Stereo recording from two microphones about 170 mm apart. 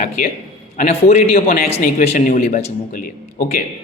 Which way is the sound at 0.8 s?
40° left (ahead or behind).